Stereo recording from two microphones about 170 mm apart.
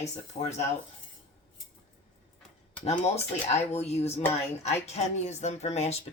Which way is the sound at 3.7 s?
40° left (ahead or behind).